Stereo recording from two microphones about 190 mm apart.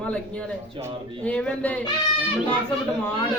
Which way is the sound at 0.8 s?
25° right (ahead or behind).